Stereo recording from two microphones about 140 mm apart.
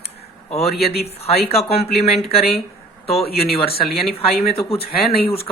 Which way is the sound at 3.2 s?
90° left.